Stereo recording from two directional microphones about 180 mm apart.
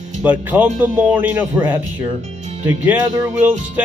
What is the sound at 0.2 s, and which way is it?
Music, 10° right (ahead or behind).